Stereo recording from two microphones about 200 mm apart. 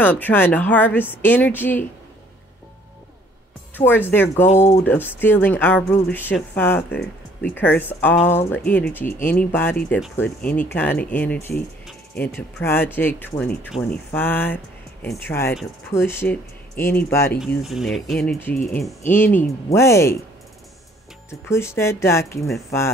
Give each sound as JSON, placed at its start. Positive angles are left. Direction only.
{"t": 0.0, "sound": "speech", "side_deg": 10}
{"t": 3.7, "sound": "speech", "side_deg": 10}
{"t": 4.6, "sound": "speech", "side_deg": 35}
{"t": 4.8, "sound": "speech", "side_deg": 10}
{"t": 17.6, "sound": "speech", "side_deg": 0}
{"t": 21.3, "sound": "speech", "side_deg": 15}